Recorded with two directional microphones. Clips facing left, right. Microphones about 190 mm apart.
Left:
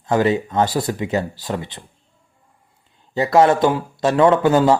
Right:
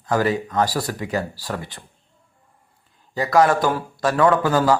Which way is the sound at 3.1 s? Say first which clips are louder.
Left 3 dB; 25° left (ahead or behind).